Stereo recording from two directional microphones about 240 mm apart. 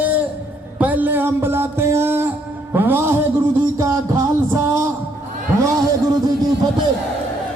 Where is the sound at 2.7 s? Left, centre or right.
Centre.